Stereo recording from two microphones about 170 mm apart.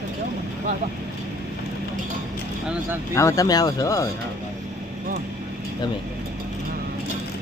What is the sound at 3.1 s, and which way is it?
Speech, 20° left (ahead or behind).